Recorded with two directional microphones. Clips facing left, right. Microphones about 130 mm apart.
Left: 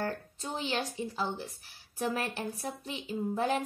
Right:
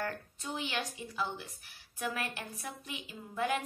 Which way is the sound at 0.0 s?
30° left (ahead or behind).